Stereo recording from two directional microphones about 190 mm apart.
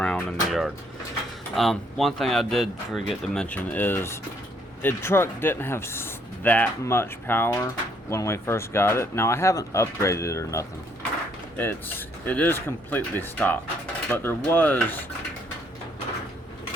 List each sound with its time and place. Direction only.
0.0 s speech: 5° left (ahead or behind)